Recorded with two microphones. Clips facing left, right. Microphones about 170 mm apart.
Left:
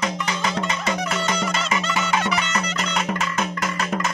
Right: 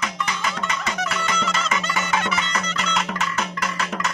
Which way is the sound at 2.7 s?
45° left (ahead or behind).